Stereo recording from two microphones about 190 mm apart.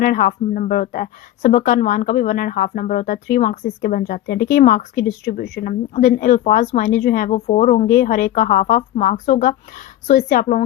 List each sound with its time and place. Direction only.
0.0 s a woman's voice: 45° left (ahead or behind)
5.9 s a woman's voice: 40° left (ahead or behind)